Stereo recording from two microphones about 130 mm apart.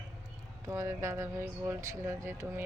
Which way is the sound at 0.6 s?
25° right (ahead or behind).